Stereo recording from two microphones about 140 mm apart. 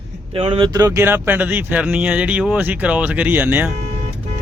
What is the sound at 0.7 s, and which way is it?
Speech, 20° right (ahead or behind).